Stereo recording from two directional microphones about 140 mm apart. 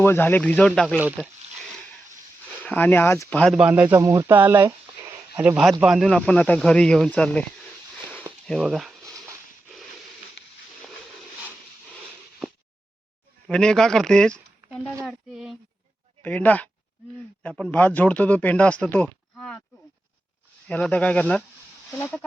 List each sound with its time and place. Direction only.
0.0 s speech: 15° left (ahead or behind)
2.6 s speech: 10° left (ahead or behind)
3.5 s speech: 10° right (ahead or behind)
3.9 s speech: 25° right (ahead or behind); by 7.4 s 5° left (ahead or behind)
8.4 s a sound: centre (ahead or behind)
13.5 s speech: 5° left (ahead or behind)
16.2 s speech: 10° left (ahead or behind)
19.0 s a sound: 5° left (ahead or behind)
20.7 s speech: 10° left (ahead or behind)